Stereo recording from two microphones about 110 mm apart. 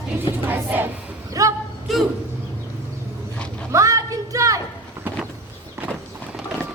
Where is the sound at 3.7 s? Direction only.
30° right (ahead or behind).